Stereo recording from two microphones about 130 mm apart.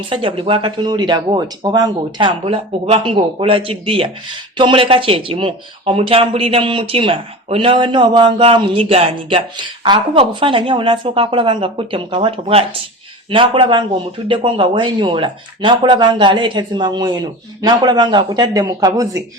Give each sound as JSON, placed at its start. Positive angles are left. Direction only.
{"t": 0.1, "sound": "speech", "side_deg": -40}
{"t": 2.4, "sound": "speech", "side_deg": -45}